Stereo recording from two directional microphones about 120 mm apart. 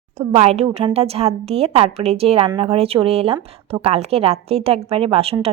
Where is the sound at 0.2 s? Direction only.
60° right (ahead or behind).